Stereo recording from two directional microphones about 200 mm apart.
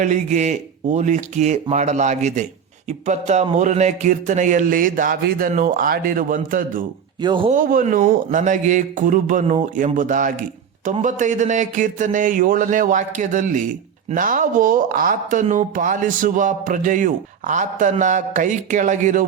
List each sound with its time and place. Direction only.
0.0 s speech: 35° right (ahead or behind)
7.2 s speech: 25° right (ahead or behind)
7.5 s speech: 45° right (ahead or behind)